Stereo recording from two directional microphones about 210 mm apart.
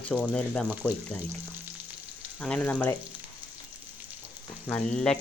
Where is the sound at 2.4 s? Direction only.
5° left (ahead or behind).